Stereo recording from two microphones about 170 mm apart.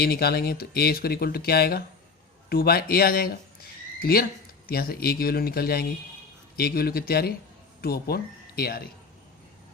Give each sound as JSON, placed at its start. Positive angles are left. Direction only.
{"t": 0.0, "sound": "speech", "side_deg": 65}